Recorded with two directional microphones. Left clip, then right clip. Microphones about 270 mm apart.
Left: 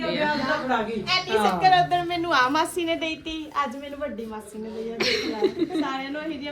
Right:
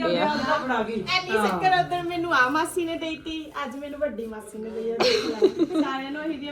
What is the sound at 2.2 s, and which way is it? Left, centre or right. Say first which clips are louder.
Speech: right 1 dB; left.